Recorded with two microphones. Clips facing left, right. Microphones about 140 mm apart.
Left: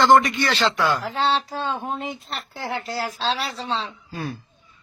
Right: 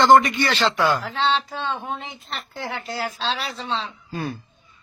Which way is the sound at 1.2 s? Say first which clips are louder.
Even; 40° left (ahead or behind).